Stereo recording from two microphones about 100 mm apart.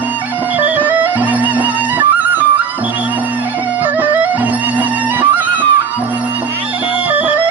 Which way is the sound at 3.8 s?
20° right (ahead or behind).